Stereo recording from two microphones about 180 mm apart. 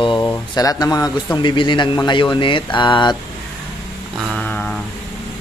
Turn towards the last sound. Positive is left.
turn(degrees=10)  # may be behind; listen again after turning